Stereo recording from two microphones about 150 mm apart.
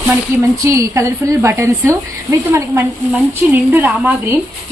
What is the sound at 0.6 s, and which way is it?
A woman's voice, 20° right (ahead or behind).